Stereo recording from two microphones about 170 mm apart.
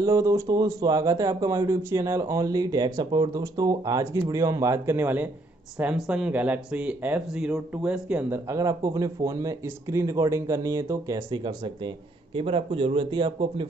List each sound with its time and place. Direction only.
0.0 s speech: 20° right (ahead or behind)